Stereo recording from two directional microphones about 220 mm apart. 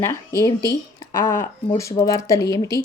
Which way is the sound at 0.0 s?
15° left (ahead or behind).